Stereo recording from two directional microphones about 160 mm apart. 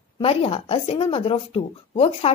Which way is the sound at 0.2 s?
35° left (ahead or behind).